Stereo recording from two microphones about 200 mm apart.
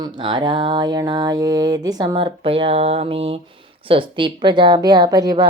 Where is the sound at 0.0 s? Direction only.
20° right (ahead or behind).